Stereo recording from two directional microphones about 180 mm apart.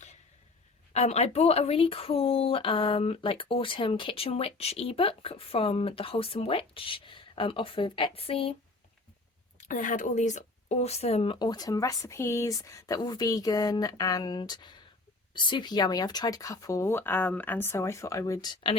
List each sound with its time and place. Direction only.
0.9 s speech: 35° left (ahead or behind)
9.6 s speech: 45° left (ahead or behind); by 18.8 s 25° left (ahead or behind)